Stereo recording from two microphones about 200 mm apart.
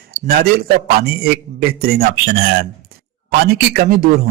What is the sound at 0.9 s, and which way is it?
A man's voice, 50° right (ahead or behind).